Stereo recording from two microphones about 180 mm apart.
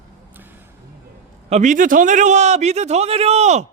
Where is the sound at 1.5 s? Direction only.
40° right (ahead or behind).